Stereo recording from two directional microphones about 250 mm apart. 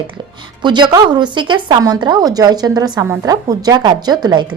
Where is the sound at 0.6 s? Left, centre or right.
Centre.